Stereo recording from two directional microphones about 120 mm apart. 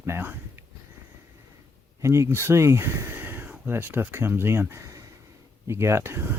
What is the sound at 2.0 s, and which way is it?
Speech, 25° right (ahead or behind).